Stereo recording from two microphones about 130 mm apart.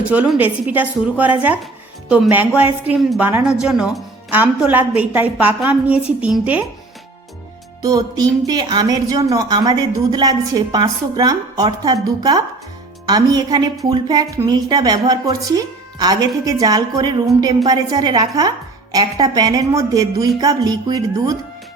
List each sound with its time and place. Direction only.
0.1 s a woman's voice: 10° right (ahead or behind)
7.8 s a woman's voice: 30° right (ahead or behind)